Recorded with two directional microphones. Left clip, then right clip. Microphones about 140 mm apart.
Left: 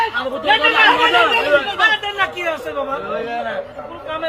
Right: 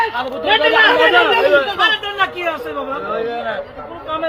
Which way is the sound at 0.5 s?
10° left (ahead or behind).